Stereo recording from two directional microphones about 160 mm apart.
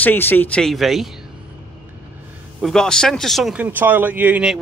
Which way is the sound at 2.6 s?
5° left (ahead or behind).